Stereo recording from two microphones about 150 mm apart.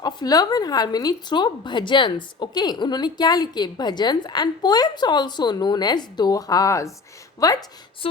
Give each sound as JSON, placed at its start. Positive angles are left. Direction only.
{"t": 0.0, "sound": "a woman's voice", "side_deg": 25}
{"t": 8.0, "sound": "music", "side_deg": 35}